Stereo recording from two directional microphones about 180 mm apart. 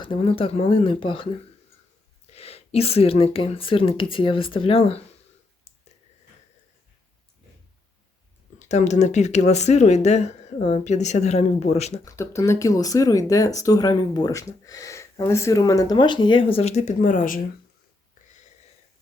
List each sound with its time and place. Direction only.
0.0 s speech: 30° left (ahead or behind)
2.3 s speech: 35° left (ahead or behind)
8.5 s speech: 40° left (ahead or behind)
12.0 s speech: 15° left (ahead or behind); by 17.4 s 50° left (ahead or behind)